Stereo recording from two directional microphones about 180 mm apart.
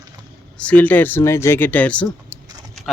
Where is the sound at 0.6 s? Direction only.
10° left (ahead or behind).